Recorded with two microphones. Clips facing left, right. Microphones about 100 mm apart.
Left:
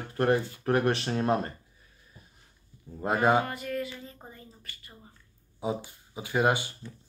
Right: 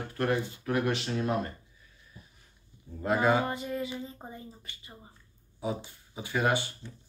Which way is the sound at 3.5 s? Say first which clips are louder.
Even; 20° right (ahead or behind).